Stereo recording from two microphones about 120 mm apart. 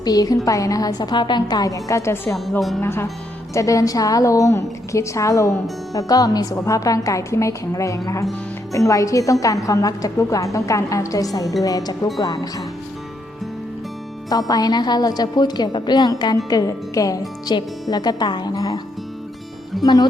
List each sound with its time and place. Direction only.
0.0 s a woman's voice: 30° left (ahead or behind)
14.3 s speech: 30° left (ahead or behind)
19.8 s speech: 30° left (ahead or behind)